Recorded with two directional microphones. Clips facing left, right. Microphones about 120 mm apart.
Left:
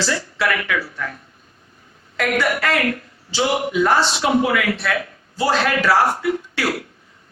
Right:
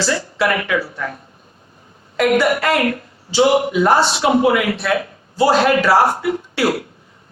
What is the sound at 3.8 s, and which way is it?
A woman's voice, 30° right (ahead or behind).